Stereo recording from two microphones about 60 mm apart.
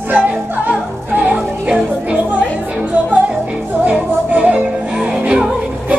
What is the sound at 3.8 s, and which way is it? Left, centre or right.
Music, right.